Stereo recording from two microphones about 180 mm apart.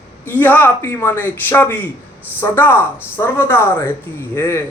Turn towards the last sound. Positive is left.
turn(degrees=10)  # may be behind; listen again after turning